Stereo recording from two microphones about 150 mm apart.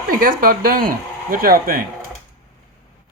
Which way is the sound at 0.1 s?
70° right (ahead or behind).